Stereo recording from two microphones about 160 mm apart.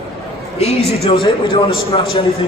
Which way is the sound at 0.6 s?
40° left (ahead or behind).